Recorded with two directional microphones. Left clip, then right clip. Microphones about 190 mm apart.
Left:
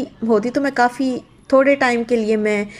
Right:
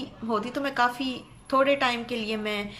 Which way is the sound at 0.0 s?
30° left (ahead or behind).